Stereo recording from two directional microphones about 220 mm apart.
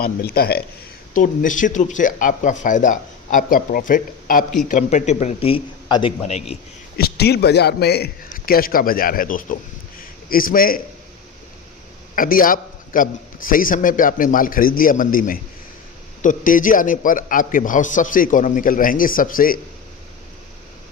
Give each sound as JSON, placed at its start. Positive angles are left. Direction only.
{"t": 0.0, "sound": "a man's voice", "side_deg": 45}
{"t": 6.9, "sound": "a man's voice", "side_deg": 45}
{"t": 12.1, "sound": "a man's voice", "side_deg": 40}